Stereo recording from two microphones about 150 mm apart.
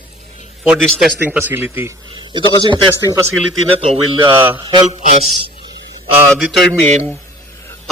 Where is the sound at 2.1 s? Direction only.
30° right (ahead or behind).